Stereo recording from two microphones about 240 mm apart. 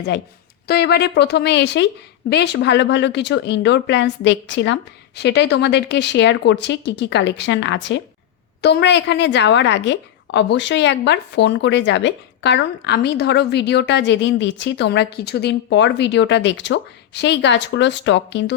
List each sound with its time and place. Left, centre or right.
0.7 s a woman's voice: left